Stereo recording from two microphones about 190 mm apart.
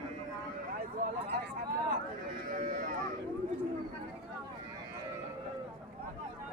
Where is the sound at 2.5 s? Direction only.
45° right (ahead or behind).